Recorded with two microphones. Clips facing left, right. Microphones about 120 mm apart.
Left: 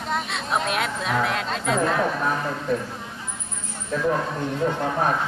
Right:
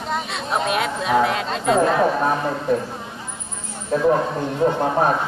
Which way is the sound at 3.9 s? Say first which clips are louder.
Right 6 dB; 30° right (ahead or behind).